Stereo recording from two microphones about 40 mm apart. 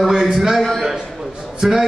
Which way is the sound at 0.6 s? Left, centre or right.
Centre.